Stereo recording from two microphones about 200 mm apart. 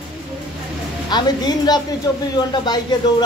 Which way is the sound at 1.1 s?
20° left (ahead or behind).